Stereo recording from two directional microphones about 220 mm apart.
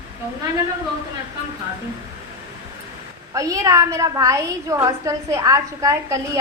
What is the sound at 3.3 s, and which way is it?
A woman's voice, 15° right (ahead or behind).